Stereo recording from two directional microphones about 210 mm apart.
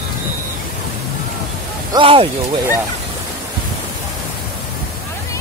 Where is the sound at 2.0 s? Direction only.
25° right (ahead or behind).